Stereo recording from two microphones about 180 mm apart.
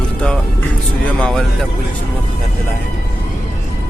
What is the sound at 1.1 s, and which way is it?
Music, 5° left (ahead or behind).